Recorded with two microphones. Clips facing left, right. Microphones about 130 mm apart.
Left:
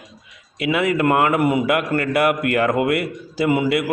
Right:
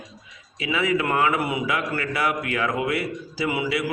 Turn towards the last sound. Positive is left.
turn(degrees=50)  # may be behind; listen again after turning